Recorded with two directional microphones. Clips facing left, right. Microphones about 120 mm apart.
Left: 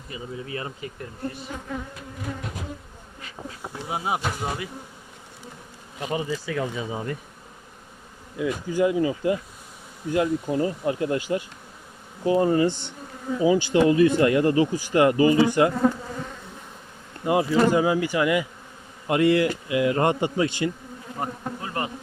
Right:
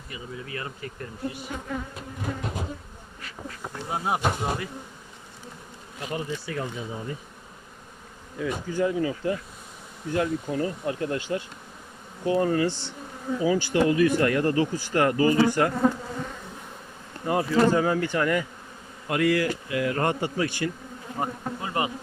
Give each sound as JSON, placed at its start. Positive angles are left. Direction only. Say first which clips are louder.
{"t": 0.1, "sound": "speech", "louder": "left 3 dB", "side_deg": 25}
{"t": 3.2, "sound": "insect", "louder": "left 1 dB", "side_deg": 20}
{"t": 3.8, "sound": "speech", "louder": "right 1 dB", "side_deg": 5}
{"t": 6.1, "sound": "speech", "louder": "left 4 dB", "side_deg": 90}
{"t": 8.4, "sound": "speech", "louder": "left 3 dB", "side_deg": 10}
{"t": 17.2, "sound": "speech", "louder": "left 2 dB", "side_deg": 15}
{"t": 19.0, "sound": "speech", "louder": "left 4 dB", "side_deg": 25}
{"t": 21.2, "sound": "bee", "louder": "right 1 dB", "side_deg": -10}